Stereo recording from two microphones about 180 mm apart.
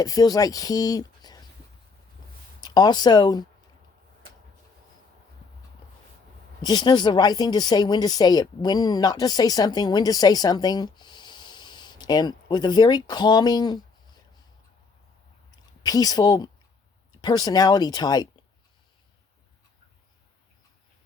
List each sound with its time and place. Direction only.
0.0 s speech: 20° left (ahead or behind)
2.6 s speech: 20° left (ahead or behind)
6.6 s speech: 25° left (ahead or behind)
15.8 s speech: 20° left (ahead or behind)